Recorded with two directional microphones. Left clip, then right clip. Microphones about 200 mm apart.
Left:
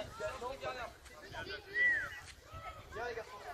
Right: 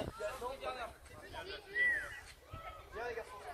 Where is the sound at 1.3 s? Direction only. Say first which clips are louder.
Left 2 dB; centre (ahead or behind).